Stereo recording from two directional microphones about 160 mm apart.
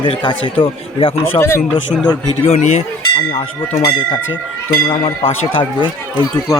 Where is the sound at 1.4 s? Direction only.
15° left (ahead or behind).